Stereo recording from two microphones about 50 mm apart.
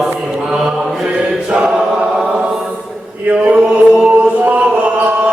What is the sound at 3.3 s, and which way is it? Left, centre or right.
Chant, right.